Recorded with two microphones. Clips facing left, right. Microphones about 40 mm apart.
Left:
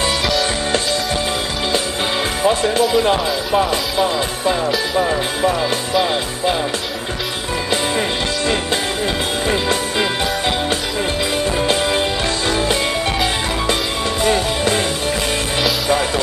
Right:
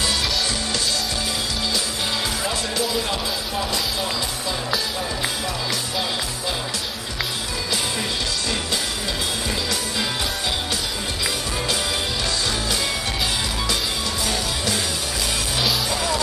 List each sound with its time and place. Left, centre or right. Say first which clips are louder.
2.4 s speech: left 9 dB; left
9.5 s music: left 7 dB; left
11.6 s music: left 6 dB; left
14.2 s music: left 11 dB; left